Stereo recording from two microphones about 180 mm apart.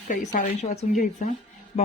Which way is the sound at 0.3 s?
40° left (ahead or behind).